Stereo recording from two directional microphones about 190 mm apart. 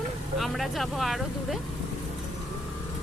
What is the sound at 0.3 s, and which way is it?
Speech, centre (ahead or behind).